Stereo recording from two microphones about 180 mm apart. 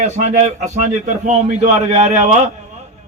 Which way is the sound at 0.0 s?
40° right (ahead or behind).